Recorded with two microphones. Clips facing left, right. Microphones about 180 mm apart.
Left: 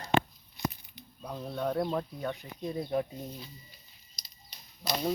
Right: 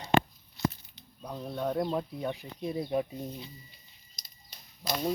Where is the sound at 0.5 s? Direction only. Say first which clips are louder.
Right 3 dB; 15° left (ahead or behind).